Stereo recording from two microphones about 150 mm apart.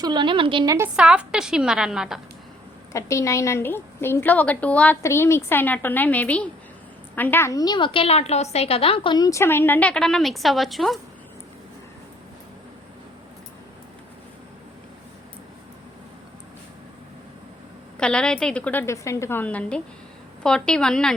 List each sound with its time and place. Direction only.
0.0 s a woman's voice: 30° right (ahead or behind)
0.9 s a woman's voice: 5° right (ahead or behind)
2.9 s a woman's voice: 20° left (ahead or behind); by 9.1 s 40° left (ahead or behind)
9.1 s a woman's voice: 20° left (ahead or behind); by 11.0 s centre (ahead or behind)
18.0 s a woman's voice: 5° left (ahead or behind)